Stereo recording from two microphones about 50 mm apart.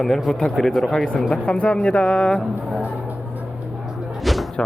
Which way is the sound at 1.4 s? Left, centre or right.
Left.